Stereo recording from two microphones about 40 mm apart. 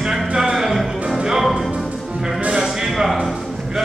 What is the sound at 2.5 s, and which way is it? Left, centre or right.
Music, centre.